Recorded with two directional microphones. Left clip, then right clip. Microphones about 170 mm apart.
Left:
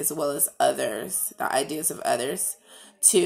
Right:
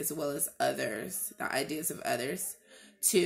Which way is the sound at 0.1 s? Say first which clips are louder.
Left 9 dB; 40° right (ahead or behind).